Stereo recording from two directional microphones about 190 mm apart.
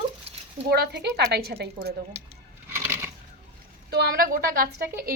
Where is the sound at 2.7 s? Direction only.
10° right (ahead or behind).